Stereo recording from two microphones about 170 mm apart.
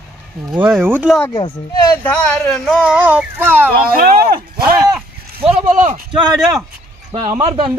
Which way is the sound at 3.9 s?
60° right (ahead or behind).